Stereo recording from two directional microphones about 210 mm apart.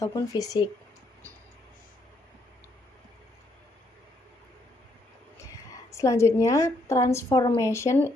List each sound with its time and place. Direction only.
0.0 s a woman's voice: 15° left (ahead or behind)
5.9 s a woman's voice: 15° left (ahead or behind)
7.3 s a woman's voice: 20° left (ahead or behind)